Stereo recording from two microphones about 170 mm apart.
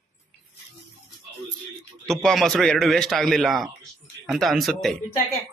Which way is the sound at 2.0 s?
5° left (ahead or behind).